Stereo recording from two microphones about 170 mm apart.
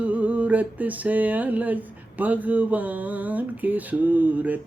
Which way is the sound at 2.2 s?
10° right (ahead or behind).